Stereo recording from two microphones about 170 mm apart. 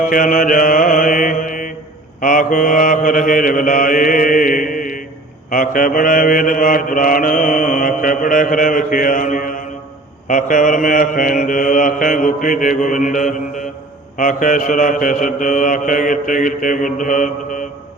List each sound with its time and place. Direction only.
0.0 s music: 50° left (ahead or behind)
2.2 s mantra: 50° left (ahead or behind)